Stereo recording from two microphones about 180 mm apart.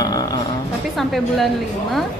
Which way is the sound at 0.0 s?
20° left (ahead or behind).